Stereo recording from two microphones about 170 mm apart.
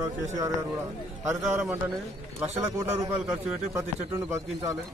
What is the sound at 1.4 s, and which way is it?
Speech, 5° right (ahead or behind).